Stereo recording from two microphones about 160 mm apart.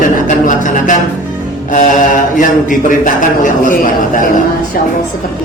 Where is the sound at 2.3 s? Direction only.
55° left (ahead or behind).